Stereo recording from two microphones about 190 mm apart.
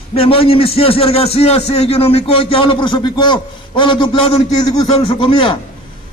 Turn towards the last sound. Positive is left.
turn(degrees=25)  # may be behind; listen again after turning